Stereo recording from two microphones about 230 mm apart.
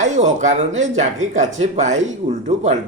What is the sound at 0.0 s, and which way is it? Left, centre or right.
Speech, right.